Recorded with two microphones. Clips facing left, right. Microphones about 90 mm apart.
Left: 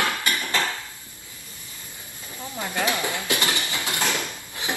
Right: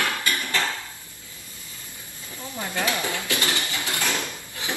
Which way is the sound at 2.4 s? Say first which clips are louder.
Left 1 dB; 20° left (ahead or behind).